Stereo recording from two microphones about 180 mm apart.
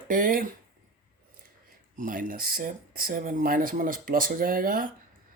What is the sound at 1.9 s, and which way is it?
Speech, 45° right (ahead or behind).